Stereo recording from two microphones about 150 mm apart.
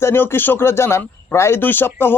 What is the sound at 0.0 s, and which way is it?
Speech, 15° left (ahead or behind).